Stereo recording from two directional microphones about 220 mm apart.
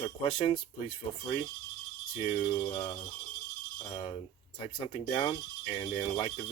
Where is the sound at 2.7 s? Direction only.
20° left (ahead or behind).